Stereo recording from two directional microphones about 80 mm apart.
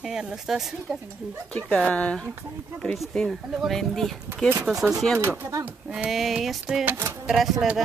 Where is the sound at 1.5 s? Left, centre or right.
Centre.